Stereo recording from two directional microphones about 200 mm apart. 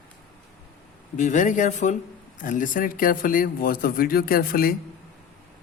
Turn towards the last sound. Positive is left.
turn(degrees=45)  # may be behind; listen again after turning